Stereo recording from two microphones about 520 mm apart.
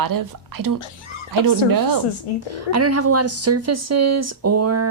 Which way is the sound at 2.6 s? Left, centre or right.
Right.